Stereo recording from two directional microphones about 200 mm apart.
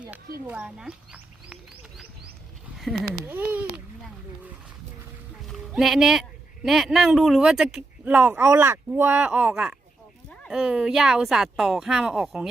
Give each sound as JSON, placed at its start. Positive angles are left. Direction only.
{"t": 0.4, "sound": "speech", "side_deg": -5}
{"t": 2.7, "sound": "speech", "side_deg": 0}
{"t": 5.5, "sound": "speech", "side_deg": 0}